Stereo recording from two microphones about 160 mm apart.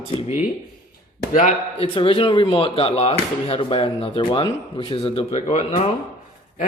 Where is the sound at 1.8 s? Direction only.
35° left (ahead or behind).